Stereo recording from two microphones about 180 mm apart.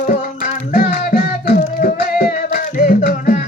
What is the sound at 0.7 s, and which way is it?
Music, 50° left (ahead or behind).